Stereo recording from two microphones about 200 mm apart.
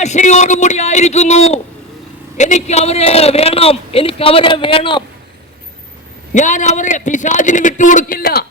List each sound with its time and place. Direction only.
0.0 s a man's voice: 35° left (ahead or behind)
6.3 s a man's voice: 40° left (ahead or behind)